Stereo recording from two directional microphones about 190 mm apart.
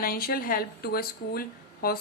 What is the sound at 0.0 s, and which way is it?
A woman's voice, 50° left (ahead or behind).